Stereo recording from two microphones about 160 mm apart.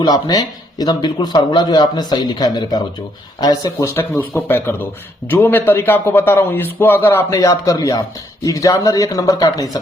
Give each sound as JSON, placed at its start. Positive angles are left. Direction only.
{"t": 0.0, "sound": "a man's voice", "side_deg": 25}